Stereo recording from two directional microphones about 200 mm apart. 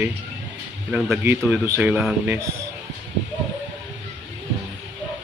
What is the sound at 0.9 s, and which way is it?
A man's voice, 10° right (ahead or behind).